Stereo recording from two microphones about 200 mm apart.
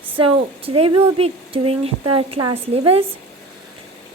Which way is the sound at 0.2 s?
25° right (ahead or behind).